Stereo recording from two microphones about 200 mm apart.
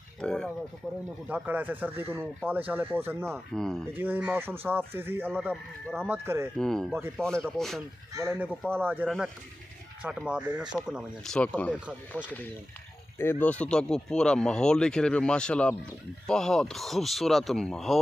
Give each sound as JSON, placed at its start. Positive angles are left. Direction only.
{"t": 0.2, "sound": "speech", "side_deg": 5}
{"t": 1.3, "sound": "speech", "side_deg": -10}
{"t": 3.5, "sound": "speech", "side_deg": 0}
{"t": 3.9, "sound": "speech", "side_deg": -10}
{"t": 5.5, "sound": "speech", "side_deg": 5}
{"t": 6.0, "sound": "speech", "side_deg": -10}
{"t": 6.6, "sound": "speech", "side_deg": 0}
{"t": 8.1, "sound": "speech", "side_deg": -10}
{"t": 13.2, "sound": "speech", "side_deg": 10}